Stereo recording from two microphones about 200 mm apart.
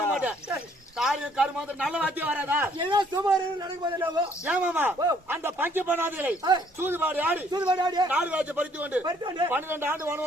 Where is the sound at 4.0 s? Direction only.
5° right (ahead or behind).